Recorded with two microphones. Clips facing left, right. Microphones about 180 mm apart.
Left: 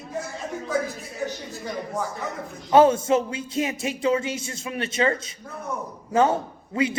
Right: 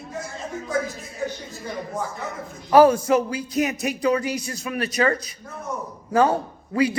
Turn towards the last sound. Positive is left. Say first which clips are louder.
# right 3 dB
turn(degrees=25)  # may be behind; listen again after turning